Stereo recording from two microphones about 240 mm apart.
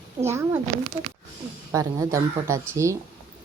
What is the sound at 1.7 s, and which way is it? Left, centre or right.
Speech, centre.